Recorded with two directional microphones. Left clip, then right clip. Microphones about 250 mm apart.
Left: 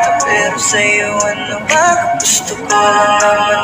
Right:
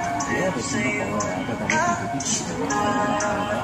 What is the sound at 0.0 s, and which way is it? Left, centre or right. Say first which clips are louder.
Music: left 13 dB; left.